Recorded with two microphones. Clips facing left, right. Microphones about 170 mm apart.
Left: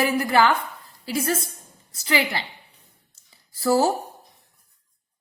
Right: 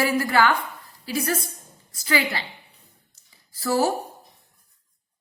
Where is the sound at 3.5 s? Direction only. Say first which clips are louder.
Left 2 dB; 25° left (ahead or behind).